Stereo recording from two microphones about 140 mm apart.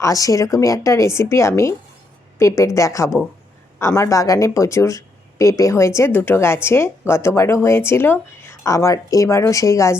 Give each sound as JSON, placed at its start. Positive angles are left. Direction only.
{"t": 0.0, "sound": "speech", "side_deg": 25}